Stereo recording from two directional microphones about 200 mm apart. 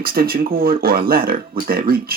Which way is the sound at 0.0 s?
50° right (ahead or behind).